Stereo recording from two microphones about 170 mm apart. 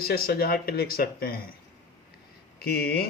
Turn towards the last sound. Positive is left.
turn(degrees=65)  # may be behind; listen again after turning